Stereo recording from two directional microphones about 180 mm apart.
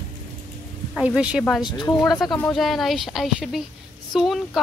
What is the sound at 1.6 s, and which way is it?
Speech, 25° left (ahead or behind).